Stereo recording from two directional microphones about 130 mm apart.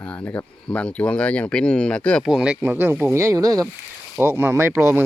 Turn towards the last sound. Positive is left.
turn(degrees=-15)  # may be behind; listen again after turning